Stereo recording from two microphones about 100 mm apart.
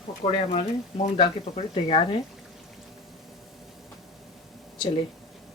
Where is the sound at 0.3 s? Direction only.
85° left; by 2.0 s 65° left (ahead or behind).